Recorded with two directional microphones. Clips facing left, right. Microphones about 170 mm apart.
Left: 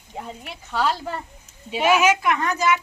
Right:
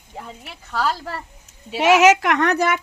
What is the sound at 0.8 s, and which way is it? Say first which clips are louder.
Speech: even; centre (ahead or behind).